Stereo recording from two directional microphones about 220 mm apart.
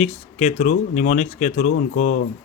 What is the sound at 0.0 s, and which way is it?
Speech, 30° left (ahead or behind).